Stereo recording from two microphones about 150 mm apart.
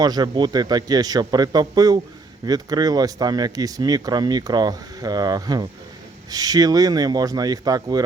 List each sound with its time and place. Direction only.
0.0 s speech: 25° right (ahead or behind)